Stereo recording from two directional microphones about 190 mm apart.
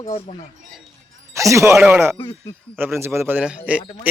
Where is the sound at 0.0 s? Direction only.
15° left (ahead or behind).